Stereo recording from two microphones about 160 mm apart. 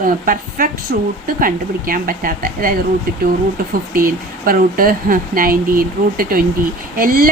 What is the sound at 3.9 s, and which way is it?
Speech, 65° right (ahead or behind).